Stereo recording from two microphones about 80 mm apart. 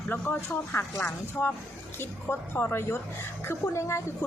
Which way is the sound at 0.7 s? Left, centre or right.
Left.